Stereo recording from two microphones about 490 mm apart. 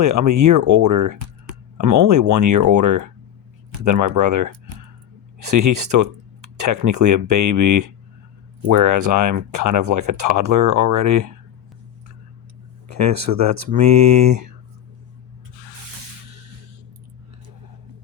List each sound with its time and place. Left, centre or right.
0.0 s speech: right
5.5 s speech: right
12.9 s speech: right